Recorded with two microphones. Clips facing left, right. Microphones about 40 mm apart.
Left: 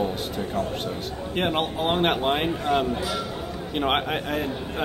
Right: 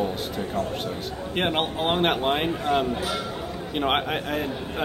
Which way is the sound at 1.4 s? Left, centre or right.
Centre.